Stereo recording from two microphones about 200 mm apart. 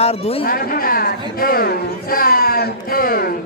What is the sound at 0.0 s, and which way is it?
Speech, 30° left (ahead or behind).